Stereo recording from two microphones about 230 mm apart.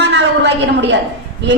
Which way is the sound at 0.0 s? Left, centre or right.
Right.